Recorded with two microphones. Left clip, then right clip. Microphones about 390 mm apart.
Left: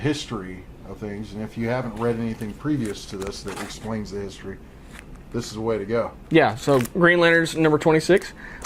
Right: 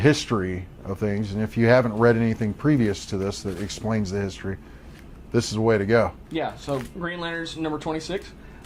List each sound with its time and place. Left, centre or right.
0.0 s speech: right
6.3 s speech: left